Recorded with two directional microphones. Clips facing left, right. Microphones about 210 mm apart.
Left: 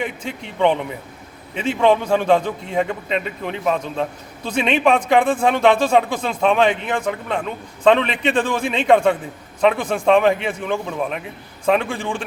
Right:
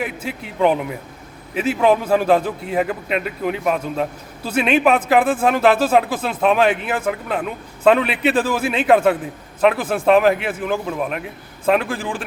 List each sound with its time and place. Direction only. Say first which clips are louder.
0.0 s speech: right 1 dB; 5° right (ahead or behind)